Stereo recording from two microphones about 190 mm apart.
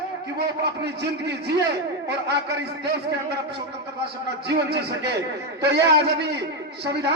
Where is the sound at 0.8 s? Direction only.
65° right (ahead or behind).